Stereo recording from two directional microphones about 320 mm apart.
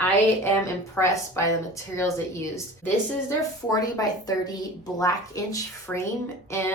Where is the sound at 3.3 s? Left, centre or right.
Centre.